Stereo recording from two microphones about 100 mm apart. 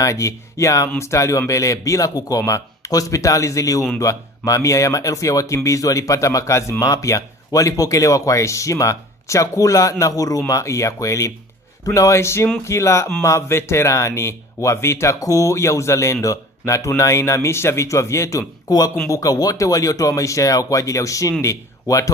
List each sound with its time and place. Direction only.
0.0 s a man's voice: 30° left (ahead or behind)